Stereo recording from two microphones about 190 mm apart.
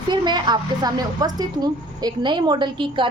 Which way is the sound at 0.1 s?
25° right (ahead or behind).